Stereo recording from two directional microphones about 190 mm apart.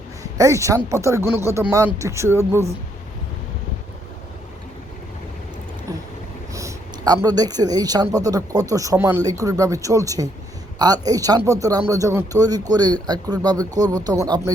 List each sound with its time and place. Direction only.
0.2 s speech: 15° right (ahead or behind)
6.5 s speech: 15° right (ahead or behind)